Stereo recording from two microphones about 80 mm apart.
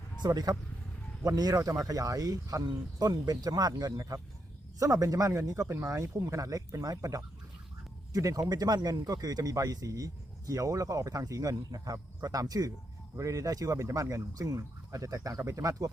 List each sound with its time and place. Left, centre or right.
0.2 s speech: right